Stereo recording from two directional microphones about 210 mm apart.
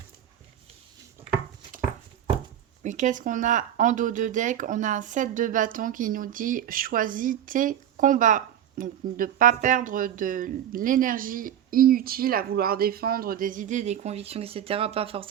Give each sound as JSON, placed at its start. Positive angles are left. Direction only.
{"t": 2.8, "sound": "speech", "side_deg": -35}